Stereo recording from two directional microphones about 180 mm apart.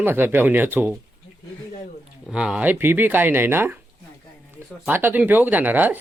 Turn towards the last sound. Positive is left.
turn(degrees=-10)  # may be behind; listen again after turning